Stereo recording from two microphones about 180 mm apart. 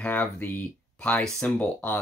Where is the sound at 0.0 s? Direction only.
10° left (ahead or behind).